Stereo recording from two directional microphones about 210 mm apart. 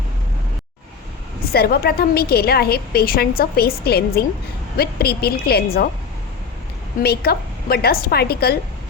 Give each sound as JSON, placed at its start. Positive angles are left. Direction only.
{"t": 1.5, "sound": "a woman's voice", "side_deg": 45}
{"t": 7.0, "sound": "a woman's voice", "side_deg": 50}